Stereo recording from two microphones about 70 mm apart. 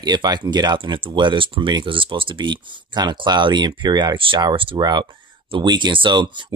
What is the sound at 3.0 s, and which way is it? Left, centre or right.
Speech, right.